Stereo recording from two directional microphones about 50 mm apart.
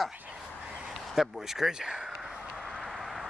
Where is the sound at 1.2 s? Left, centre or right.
Centre.